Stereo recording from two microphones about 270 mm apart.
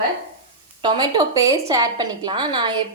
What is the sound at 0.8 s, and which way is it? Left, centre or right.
A woman's voice, centre.